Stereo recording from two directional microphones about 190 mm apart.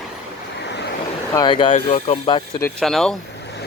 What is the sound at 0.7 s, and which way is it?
Vehicle, 65° left (ahead or behind).